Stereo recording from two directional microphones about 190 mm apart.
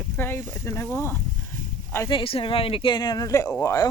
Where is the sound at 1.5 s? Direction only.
45° right (ahead or behind).